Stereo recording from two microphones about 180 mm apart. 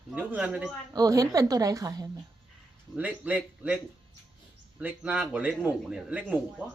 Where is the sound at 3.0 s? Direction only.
10° right (ahead or behind).